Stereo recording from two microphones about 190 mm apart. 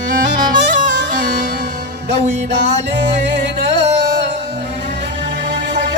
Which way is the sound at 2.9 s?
65° right (ahead or behind).